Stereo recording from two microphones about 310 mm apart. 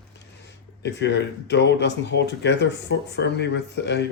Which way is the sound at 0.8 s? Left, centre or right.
Left.